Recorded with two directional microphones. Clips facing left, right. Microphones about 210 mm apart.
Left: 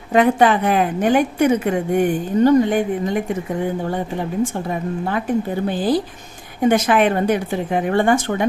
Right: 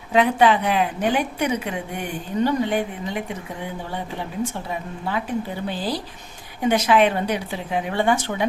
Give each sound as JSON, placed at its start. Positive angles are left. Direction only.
{"t": 0.1, "sound": "a woman's voice", "side_deg": 50}
{"t": 4.7, "sound": "a woman's voice", "side_deg": 50}